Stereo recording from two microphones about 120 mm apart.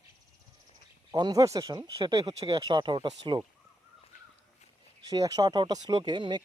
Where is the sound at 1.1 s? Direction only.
35° right (ahead or behind).